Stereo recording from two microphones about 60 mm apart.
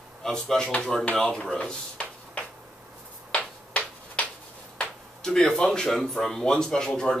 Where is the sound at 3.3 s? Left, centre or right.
Left.